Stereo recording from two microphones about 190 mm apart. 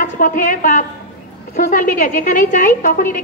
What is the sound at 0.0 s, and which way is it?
A woman's voice, 45° left (ahead or behind).